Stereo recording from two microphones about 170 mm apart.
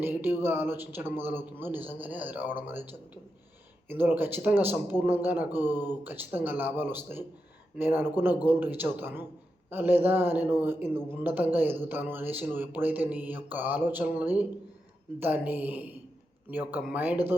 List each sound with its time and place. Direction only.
0.0 s a man's voice: 10° right (ahead or behind)
3.8 s a man's voice: 10° right (ahead or behind)
5.7 s speech: 25° left (ahead or behind)
6.0 s a man's voice: 10° right (ahead or behind)